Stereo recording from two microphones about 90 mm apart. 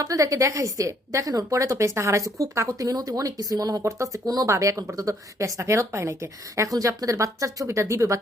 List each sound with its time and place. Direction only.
0.0 s a woman's voice: 40° right (ahead or behind)